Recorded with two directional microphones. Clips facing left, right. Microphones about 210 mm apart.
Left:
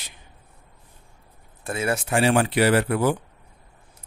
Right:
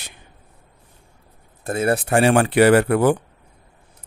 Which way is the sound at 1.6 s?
40° right (ahead or behind).